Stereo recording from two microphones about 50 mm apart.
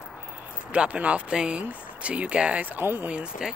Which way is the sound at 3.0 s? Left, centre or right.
Right.